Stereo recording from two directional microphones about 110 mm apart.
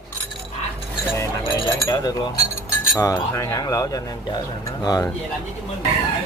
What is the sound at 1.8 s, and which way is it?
Speech, 35° left (ahead or behind).